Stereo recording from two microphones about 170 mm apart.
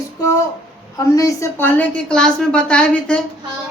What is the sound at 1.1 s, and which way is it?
A woman's voice, 20° left (ahead or behind).